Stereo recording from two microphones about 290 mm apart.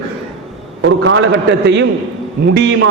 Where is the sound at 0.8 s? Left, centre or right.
Right.